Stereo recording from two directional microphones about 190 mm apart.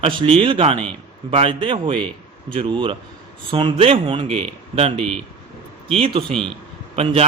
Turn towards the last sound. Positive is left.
turn(degrees=-30)  # may be behind; listen again after turning